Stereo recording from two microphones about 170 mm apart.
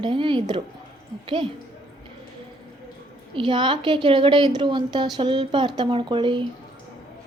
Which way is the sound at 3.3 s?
30° right (ahead or behind).